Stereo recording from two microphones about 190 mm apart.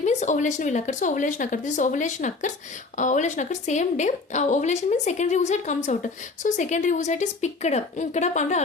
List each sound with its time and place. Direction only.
0.0 s a woman's voice: 40° left (ahead or behind)